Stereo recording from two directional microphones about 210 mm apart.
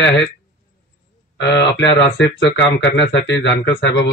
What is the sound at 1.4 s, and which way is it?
Speech, 60° left (ahead or behind).